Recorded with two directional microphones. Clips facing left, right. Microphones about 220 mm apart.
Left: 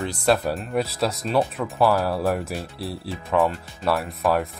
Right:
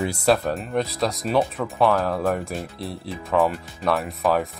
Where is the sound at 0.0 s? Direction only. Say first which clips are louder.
Right 1 dB; 10° right (ahead or behind).